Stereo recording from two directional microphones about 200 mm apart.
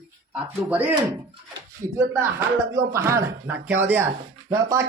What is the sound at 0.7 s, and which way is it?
Speech, 10° right (ahead or behind).